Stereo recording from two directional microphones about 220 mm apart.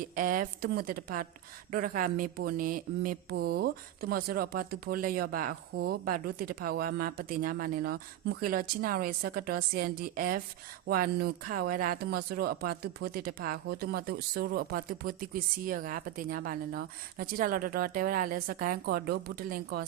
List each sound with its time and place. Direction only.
0.0 s speech: 40° right (ahead or behind)